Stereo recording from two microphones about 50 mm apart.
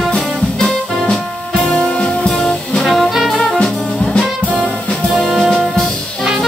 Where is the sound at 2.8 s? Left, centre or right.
Centre.